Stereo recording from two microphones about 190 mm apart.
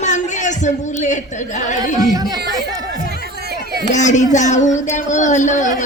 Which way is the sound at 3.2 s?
55° right (ahead or behind).